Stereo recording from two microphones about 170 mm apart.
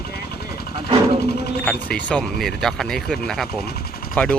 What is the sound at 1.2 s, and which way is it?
Music, 75° left (ahead or behind).